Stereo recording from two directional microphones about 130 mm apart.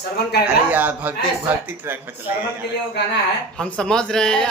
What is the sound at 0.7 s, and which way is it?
Speech, 10° right (ahead or behind).